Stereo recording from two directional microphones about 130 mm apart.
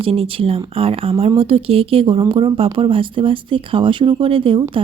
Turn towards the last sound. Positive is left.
turn(degrees=-45)  # may be behind; listen again after turning